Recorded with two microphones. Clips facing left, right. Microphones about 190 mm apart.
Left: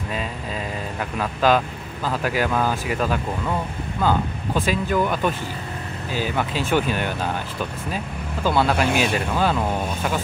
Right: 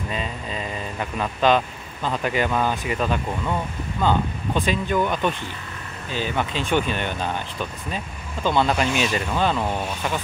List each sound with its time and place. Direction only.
0.9 s speech: 5° left (ahead or behind)
8.5 s speech: 5° left (ahead or behind)
8.8 s speech: 55° left (ahead or behind)
9.1 s speech: 5° left (ahead or behind)